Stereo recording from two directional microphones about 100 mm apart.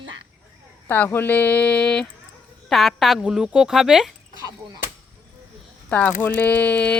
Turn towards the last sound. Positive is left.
turn(degrees=15)  # may be behind; listen again after turning